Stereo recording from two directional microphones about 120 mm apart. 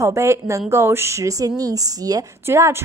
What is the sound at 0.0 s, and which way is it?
A woman's voice, 25° right (ahead or behind).